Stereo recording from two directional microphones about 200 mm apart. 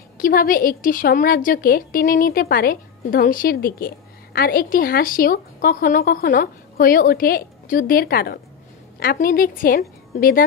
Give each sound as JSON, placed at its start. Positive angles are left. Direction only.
{"t": 0.2, "sound": "a woman's voice", "side_deg": 45}